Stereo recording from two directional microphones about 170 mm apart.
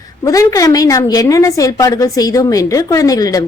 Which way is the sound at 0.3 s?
20° left (ahead or behind).